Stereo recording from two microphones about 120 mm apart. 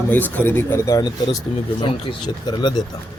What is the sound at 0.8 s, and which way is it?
Speech, 30° left (ahead or behind).